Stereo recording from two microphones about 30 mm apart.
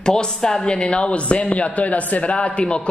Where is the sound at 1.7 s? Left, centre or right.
Left.